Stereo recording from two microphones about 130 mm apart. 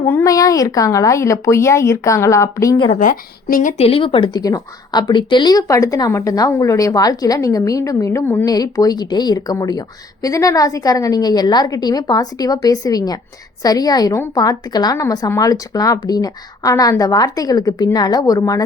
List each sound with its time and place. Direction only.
0.0 s speech: 20° left (ahead or behind)
3.0 s speech: 90° left
3.8 s speech: 45° left (ahead or behind)
4.4 s speech: 30° left (ahead or behind)